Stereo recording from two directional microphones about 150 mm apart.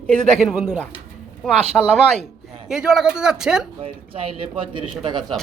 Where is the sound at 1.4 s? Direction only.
5° left (ahead or behind).